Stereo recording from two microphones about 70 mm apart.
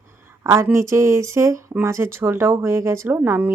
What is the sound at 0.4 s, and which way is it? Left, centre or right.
A woman's voice, right.